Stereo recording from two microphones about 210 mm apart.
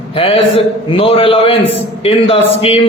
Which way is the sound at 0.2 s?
25° left (ahead or behind).